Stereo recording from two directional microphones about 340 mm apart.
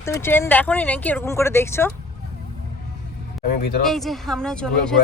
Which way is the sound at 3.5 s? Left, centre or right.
Left.